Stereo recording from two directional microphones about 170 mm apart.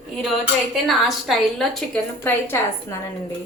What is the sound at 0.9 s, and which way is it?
A woman's voice, centre (ahead or behind).